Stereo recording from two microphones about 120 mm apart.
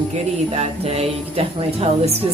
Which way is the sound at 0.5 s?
60° right (ahead or behind).